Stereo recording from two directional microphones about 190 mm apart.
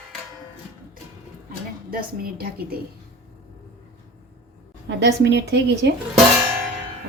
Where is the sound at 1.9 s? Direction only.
50° right (ahead or behind).